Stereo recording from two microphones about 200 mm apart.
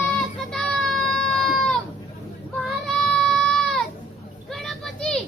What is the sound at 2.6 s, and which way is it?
Child singing, centre (ahead or behind).